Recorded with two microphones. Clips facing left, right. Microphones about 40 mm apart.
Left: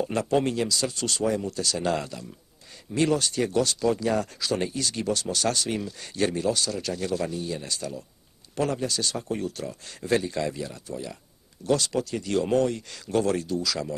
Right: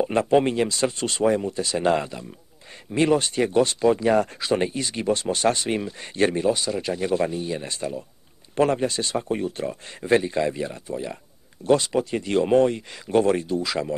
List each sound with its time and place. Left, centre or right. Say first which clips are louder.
0.0 s speech: right 5 dB; right